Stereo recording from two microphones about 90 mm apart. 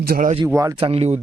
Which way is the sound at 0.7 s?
90° right.